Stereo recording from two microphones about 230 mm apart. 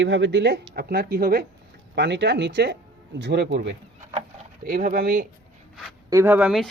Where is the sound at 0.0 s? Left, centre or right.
Right.